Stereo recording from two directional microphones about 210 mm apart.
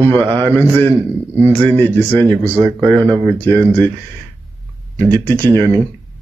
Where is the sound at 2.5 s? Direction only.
15° right (ahead or behind).